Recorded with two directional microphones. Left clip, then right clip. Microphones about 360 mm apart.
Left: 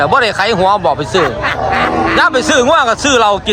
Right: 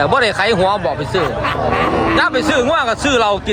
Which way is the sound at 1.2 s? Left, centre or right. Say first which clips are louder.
Left 4 dB; left.